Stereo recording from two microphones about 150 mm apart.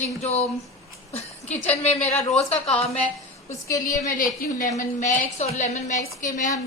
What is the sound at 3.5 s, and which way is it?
Speech, 20° left (ahead or behind).